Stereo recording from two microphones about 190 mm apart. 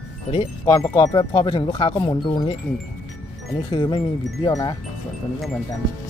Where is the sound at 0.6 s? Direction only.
15° left (ahead or behind).